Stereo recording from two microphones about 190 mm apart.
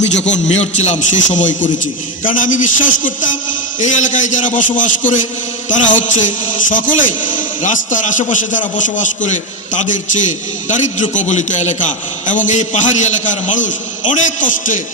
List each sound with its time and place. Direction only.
0.2 s a man's voice: 35° left (ahead or behind)